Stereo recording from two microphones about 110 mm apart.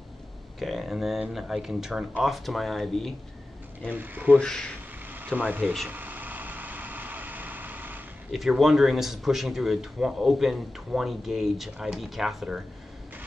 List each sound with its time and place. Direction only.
0.6 s a man's voice: centre (ahead or behind)
3.9 s speech: 15° right (ahead or behind)
4.4 s a man's voice: 5° left (ahead or behind)
5.1 s speech: 15° right (ahead or behind)
5.9 s vehicle: 15° right (ahead or behind)
8.3 s a man's voice: centre (ahead or behind)